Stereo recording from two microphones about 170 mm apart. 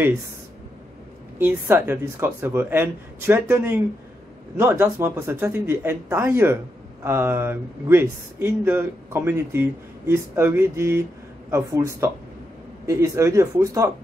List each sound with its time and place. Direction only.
1.4 s speech: 15° right (ahead or behind)